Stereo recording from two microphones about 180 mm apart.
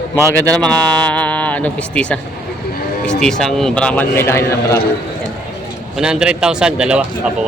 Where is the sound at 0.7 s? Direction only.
5° left (ahead or behind).